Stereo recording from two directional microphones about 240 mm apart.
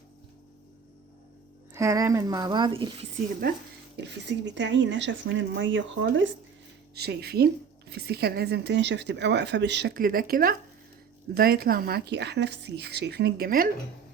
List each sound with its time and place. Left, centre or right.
1.7 s speech: centre
3.9 s a woman's voice: right